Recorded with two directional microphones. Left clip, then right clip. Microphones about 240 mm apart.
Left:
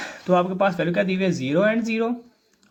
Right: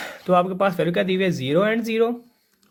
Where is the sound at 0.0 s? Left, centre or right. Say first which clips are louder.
Right 1 dB; right.